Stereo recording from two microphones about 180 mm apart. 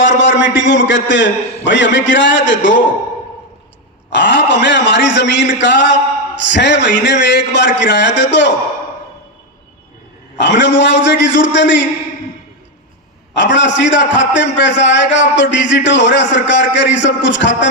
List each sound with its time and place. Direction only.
0.2 s a man's voice: 90° left
4.1 s a man's voice: 75° left (ahead or behind)
10.3 s a man's voice: 75° left (ahead or behind)
13.3 s a man's voice: 80° left